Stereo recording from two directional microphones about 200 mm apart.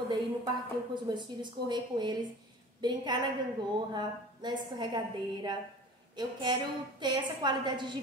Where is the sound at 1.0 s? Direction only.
20° right (ahead or behind).